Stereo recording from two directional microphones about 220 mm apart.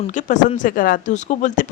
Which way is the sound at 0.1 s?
35° left (ahead or behind).